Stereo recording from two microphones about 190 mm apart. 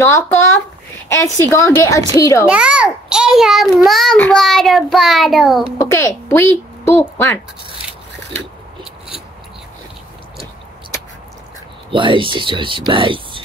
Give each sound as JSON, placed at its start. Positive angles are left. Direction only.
{"t": 0.0, "sound": "a woman's voice", "side_deg": 10}
{"t": 2.4, "sound": "child singing", "side_deg": -5}
{"t": 5.8, "sound": "a woman's voice", "side_deg": 15}
{"t": 11.9, "sound": "speech", "side_deg": -25}